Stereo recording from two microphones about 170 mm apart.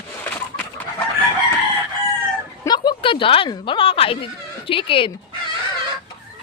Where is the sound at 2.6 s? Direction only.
25° left (ahead or behind).